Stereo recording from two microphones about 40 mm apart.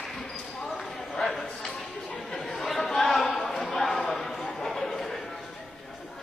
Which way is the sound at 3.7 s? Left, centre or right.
Centre.